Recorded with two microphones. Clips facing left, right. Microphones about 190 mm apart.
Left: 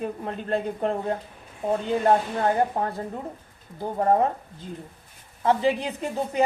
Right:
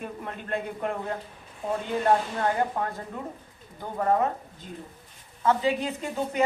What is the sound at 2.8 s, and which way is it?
A woman's voice, 30° left (ahead or behind).